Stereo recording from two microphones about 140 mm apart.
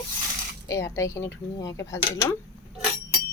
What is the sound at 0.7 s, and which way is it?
Speech, 20° left (ahead or behind).